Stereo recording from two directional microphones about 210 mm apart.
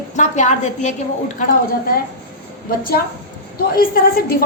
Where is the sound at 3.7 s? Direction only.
45° left (ahead or behind).